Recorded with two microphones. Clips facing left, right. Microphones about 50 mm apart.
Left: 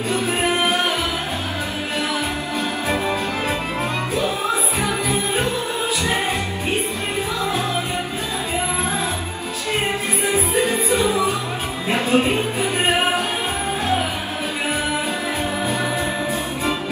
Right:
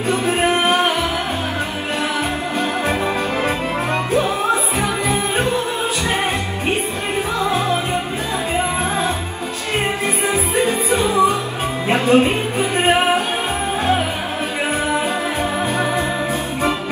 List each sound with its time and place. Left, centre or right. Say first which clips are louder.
0.1 s music: right 4 dB; right
7.4 s music: right 5 dB; right
10.2 s music: right 1 dB; right